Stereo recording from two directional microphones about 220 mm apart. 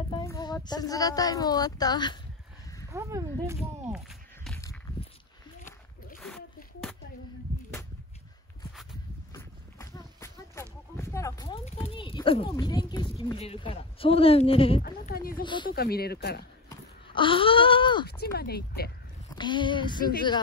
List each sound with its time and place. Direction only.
0.1 s a sound: 15° left (ahead or behind)
0.7 s speech: 15° left (ahead or behind)
2.9 s speech: 15° right (ahead or behind)
6.1 s a sound: centre (ahead or behind)
9.3 s a sound: 15° left (ahead or behind)
11.9 s a child's voice: 25° left (ahead or behind)
14.8 s speech: 40° left (ahead or behind)
15.4 s speech: 20° left (ahead or behind)
15.7 s speech: 45° left (ahead or behind)
16.6 s a sound: 20° left (ahead or behind)
18.0 s speech: 45° left (ahead or behind)
19.3 s speech: 20° left (ahead or behind)